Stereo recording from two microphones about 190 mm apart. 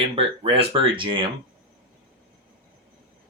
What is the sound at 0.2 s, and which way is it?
Speech, 30° right (ahead or behind).